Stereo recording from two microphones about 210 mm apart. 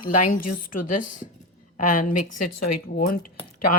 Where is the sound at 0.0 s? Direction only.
40° left (ahead or behind).